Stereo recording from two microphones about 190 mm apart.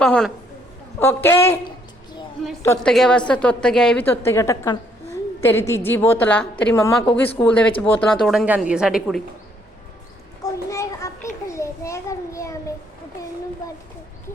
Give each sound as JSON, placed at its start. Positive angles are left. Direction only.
{"t": 0.0, "sound": "a woman's voice", "side_deg": 5}
{"t": 2.8, "sound": "a woman's voice", "side_deg": 5}
{"t": 10.4, "sound": "a sound", "side_deg": 15}